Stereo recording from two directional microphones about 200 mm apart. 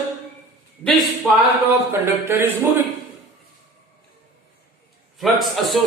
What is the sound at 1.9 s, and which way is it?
Speech, 10° right (ahead or behind).